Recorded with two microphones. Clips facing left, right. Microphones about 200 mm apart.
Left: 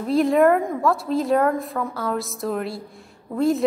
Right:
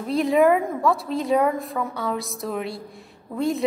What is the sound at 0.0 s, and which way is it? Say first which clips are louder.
A woman's voice: left 2 dB; centre (ahead or behind).